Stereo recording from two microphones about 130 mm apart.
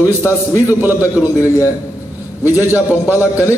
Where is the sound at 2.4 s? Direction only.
15° right (ahead or behind).